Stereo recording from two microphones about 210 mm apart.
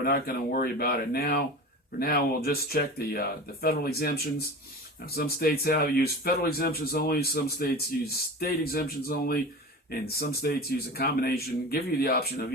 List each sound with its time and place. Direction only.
0.0 s speech: 45° left (ahead or behind)